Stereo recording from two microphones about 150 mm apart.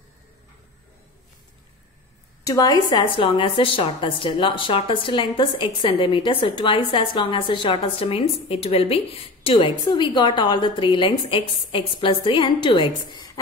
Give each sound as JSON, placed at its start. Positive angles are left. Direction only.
{"t": 2.4, "sound": "a woman's voice", "side_deg": 25}